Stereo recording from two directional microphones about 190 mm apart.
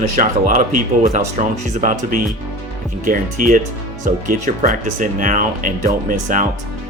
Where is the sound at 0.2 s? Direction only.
45° right (ahead or behind).